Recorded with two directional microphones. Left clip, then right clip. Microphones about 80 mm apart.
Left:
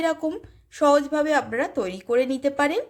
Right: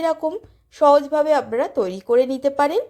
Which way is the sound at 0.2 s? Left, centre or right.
Centre.